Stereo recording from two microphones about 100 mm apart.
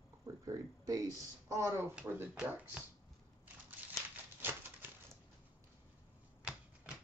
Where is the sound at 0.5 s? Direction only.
35° right (ahead or behind).